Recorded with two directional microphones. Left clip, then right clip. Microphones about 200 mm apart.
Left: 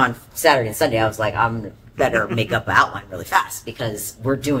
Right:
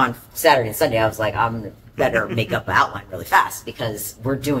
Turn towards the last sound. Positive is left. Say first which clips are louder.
# left 2 dB
turn(degrees=15)  # may be behind; listen again after turning